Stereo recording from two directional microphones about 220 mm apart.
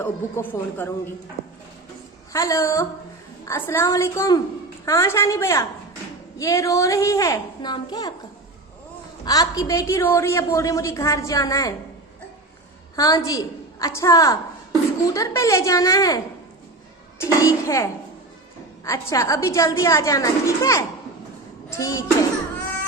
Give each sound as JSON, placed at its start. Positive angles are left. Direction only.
{"t": 0.0, "sound": "a woman's voice", "side_deg": 10}
{"t": 2.3, "sound": "a woman's voice", "side_deg": 15}
{"t": 9.2, "sound": "a woman's voice", "side_deg": 15}
{"t": 13.0, "sound": "a woman's voice", "side_deg": 15}
{"t": 18.9, "sound": "a woman's voice", "side_deg": 15}